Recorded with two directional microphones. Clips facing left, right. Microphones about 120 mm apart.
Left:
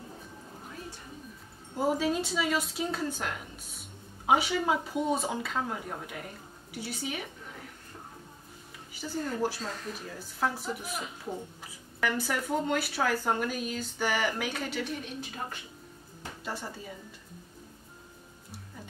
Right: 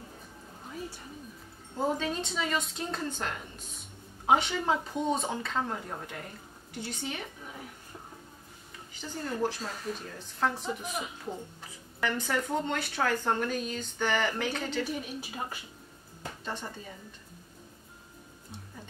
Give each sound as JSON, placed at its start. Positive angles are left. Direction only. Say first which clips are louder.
{"t": 1.8, "sound": "speech", "louder": "left 3 dB", "side_deg": 5}
{"t": 8.9, "sound": "a sound", "louder": "left 5 dB", "side_deg": 10}
{"t": 9.9, "sound": "speech", "louder": "even", "side_deg": 5}
{"t": 14.9, "sound": "speech", "louder": "right 1 dB", "side_deg": -5}
{"t": 16.4, "sound": "speech", "louder": "left 1 dB", "side_deg": 10}